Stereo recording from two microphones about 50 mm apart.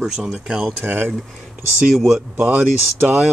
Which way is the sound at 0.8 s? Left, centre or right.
Right.